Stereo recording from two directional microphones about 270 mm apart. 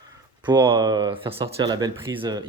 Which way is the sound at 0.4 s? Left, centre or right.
Centre.